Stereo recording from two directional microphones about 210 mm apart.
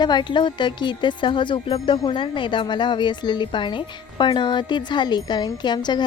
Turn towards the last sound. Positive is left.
turn(degrees=20)  # may be behind; listen again after turning